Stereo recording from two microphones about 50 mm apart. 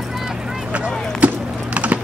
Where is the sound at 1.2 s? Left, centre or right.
Right.